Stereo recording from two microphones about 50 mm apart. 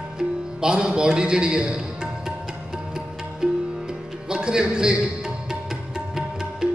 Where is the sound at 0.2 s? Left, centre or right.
Centre.